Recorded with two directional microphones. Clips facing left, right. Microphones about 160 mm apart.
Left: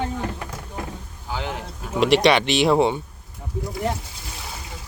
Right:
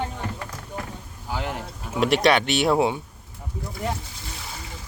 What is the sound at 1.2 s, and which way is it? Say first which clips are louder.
Speech: even; centre (ahead or behind).